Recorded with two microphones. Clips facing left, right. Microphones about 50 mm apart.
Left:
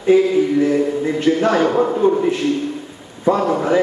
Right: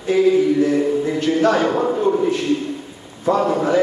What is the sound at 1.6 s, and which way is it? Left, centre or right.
Speech, centre.